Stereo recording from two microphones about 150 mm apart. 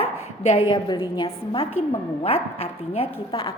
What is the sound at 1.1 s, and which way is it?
A woman's voice, 35° left (ahead or behind).